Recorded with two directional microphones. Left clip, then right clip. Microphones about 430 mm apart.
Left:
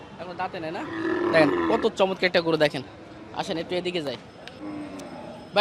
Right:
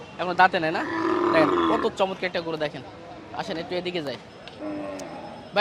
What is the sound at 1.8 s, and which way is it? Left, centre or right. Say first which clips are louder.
Speech: left 2 dB; centre.